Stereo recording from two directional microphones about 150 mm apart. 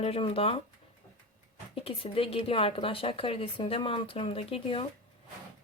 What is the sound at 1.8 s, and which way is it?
Speech, 40° left (ahead or behind).